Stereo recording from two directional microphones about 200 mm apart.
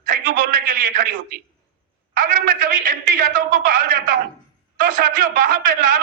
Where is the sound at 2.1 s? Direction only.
45° right (ahead or behind).